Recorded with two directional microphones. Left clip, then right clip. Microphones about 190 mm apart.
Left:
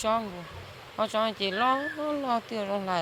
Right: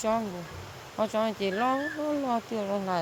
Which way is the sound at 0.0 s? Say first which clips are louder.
Left 1 dB; 10° right (ahead or behind).